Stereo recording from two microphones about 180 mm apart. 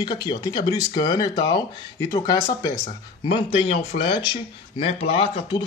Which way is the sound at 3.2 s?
30° left (ahead or behind).